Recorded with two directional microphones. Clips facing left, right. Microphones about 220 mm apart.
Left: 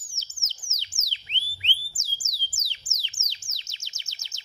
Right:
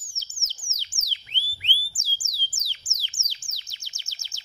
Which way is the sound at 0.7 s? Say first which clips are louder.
Right 1 dB; 20° left (ahead or behind).